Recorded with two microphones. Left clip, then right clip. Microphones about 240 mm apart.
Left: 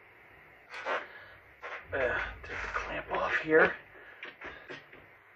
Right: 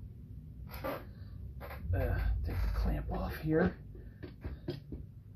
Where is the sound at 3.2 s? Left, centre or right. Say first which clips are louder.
Left 8 dB; left.